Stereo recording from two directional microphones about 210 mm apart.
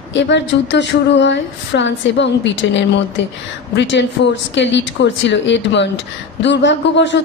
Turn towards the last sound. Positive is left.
turn(degrees=60)  # may be behind; listen again after turning